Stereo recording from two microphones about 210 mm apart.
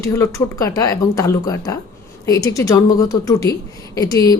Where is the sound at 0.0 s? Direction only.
15° left (ahead or behind).